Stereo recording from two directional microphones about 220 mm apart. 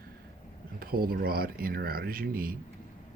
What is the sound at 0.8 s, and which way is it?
Speech, 40° right (ahead or behind).